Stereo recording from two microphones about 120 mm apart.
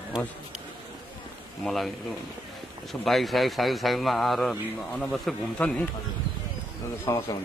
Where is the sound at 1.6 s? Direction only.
5° left (ahead or behind).